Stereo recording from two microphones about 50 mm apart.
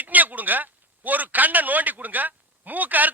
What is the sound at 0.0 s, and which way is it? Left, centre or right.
Speech, right.